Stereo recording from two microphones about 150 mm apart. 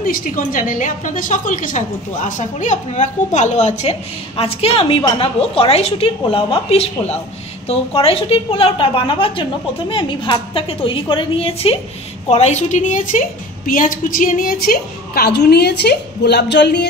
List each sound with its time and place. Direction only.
0.0 s a woman's voice: 65° left (ahead or behind); by 16.8 s 90° left